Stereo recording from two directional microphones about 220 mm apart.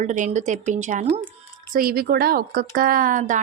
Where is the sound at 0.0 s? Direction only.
35° right (ahead or behind).